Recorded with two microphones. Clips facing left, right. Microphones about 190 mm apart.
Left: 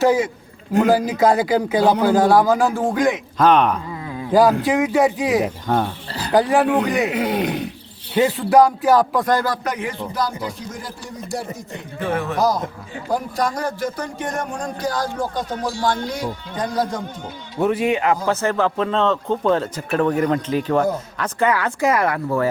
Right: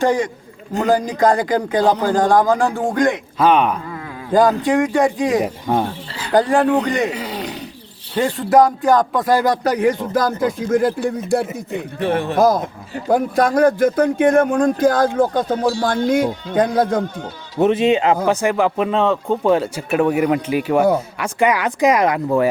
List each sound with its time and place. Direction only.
0.0 s a man's voice: 5° left (ahead or behind)
4.3 s speech: 5° left (ahead or behind)
5.7 s speech: 10° right (ahead or behind)
6.3 s speech: 5° left (ahead or behind)
7.1 s speech: 55° left (ahead or behind)
8.1 s speech: 5° left (ahead or behind)
9.3 s speech: 20° right (ahead or behind)
9.6 s speech: 40° right (ahead or behind)
10.7 s speech: 55° right (ahead or behind)
12.0 s speech: 30° right (ahead or behind)
12.4 s speech: 55° right (ahead or behind)
17.6 s speech: 20° right (ahead or behind)
18.3 s speech: 15° right (ahead or behind)